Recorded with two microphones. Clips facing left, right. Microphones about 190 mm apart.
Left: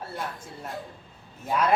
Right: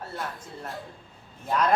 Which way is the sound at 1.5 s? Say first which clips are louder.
Even; 5° left (ahead or behind).